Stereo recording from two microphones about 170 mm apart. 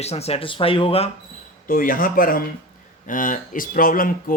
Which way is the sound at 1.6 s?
55° left (ahead or behind).